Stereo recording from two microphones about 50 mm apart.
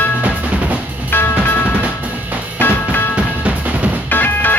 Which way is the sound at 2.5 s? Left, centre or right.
Left.